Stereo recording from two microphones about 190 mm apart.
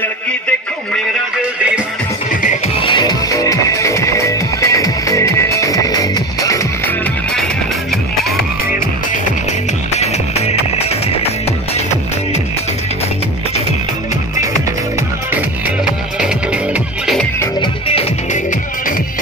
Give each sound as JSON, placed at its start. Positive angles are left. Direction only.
{"t": 2.8, "sound": "music", "side_deg": 25}
{"t": 9.9, "sound": "music", "side_deg": 35}
{"t": 15.3, "sound": "music", "side_deg": -5}